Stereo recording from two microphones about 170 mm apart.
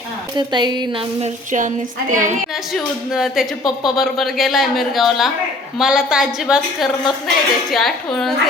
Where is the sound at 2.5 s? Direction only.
Centre (ahead or behind).